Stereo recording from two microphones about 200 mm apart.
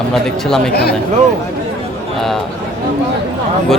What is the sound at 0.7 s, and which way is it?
Speech, 50° left (ahead or behind).